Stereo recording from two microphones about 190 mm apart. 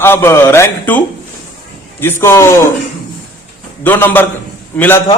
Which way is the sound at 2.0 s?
10° left (ahead or behind).